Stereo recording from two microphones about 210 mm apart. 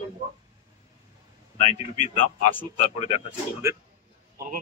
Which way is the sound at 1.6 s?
35° left (ahead or behind).